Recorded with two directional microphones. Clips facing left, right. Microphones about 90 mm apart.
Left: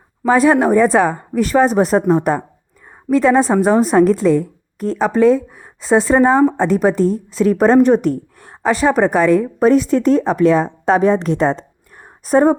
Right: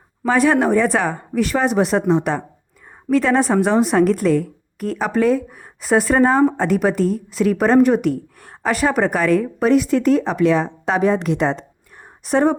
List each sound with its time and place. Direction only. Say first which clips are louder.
0.3 s a woman's voice: left 3 dB; 35° left (ahead or behind)
3.6 s a woman's voice: left 3 dB; 35° left (ahead or behind)
4.1 s speech: left 3 dB; 25° left (ahead or behind)
6.1 s speech: left 3 dB; 15° left (ahead or behind)
6.6 s a woman's voice: left 3 dB; 30° left (ahead or behind)